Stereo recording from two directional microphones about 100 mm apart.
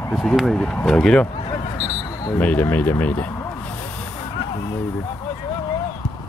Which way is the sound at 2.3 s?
15° left (ahead or behind).